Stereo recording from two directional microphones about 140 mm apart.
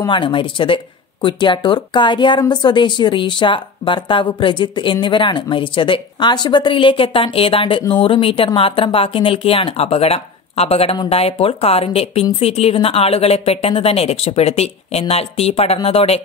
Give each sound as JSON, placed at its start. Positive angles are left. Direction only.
{"t": 0.0, "sound": "speech", "side_deg": 35}